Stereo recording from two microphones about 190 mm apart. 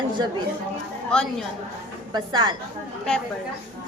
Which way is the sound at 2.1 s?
25° right (ahead or behind).